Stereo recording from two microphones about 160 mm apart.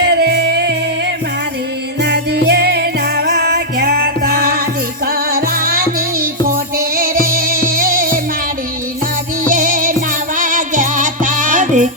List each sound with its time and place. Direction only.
0.0 s music: 90° right
2.0 s music: 90° right; by 8.2 s 65° right (ahead or behind)
9.5 s music: 55° right (ahead or behind)